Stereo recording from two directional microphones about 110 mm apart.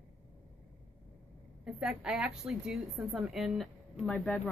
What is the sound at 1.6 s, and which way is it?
A woman's voice, 5° right (ahead or behind).